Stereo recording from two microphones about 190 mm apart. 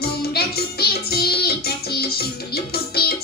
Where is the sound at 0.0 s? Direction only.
55° left (ahead or behind).